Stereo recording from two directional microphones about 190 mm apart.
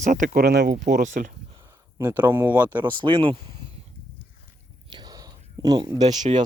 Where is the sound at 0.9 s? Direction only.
45° right (ahead or behind).